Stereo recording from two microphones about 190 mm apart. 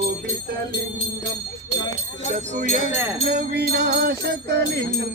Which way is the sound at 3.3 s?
60° right (ahead or behind).